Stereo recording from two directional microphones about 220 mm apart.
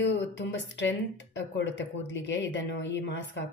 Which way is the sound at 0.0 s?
55° left (ahead or behind).